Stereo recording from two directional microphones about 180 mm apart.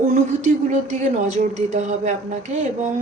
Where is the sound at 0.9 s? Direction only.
45° right (ahead or behind).